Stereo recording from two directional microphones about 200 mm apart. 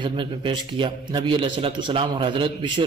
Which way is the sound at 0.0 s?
25° right (ahead or behind).